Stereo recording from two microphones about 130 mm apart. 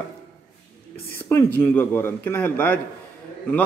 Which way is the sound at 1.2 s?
20° left (ahead or behind).